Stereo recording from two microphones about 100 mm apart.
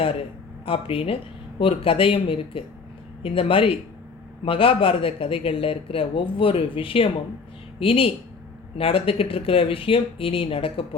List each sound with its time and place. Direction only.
0.0 s speech: 70° left (ahead or behind)